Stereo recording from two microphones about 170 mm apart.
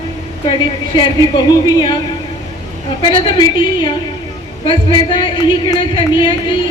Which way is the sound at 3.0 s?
30° left (ahead or behind).